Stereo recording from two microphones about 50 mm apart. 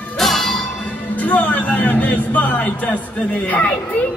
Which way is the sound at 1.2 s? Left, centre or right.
Left.